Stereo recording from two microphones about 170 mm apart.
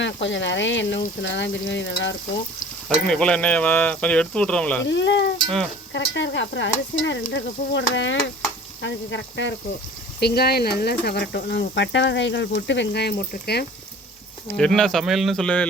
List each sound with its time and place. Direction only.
0.0 s stir: 90° left
3.1 s speech: 5° left (ahead or behind)
4.9 s stir: 90° left
10.2 s speech: 70° left (ahead or behind)
14.4 s speech: 5° left (ahead or behind)